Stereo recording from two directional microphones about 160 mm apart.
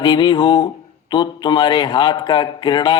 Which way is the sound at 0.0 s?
30° left (ahead or behind).